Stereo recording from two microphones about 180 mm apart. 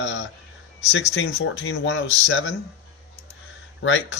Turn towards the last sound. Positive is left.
turn(degrees=90)